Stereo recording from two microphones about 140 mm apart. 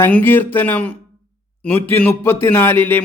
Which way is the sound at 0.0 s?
15° left (ahead or behind).